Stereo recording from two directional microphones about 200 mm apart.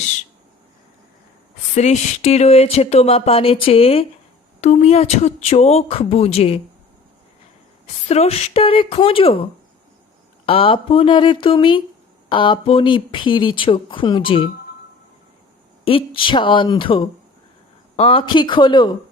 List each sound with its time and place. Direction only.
1.7 s speech: 35° left (ahead or behind)
8.0 s speech: 30° left (ahead or behind)
15.8 s speech: 25° left (ahead or behind)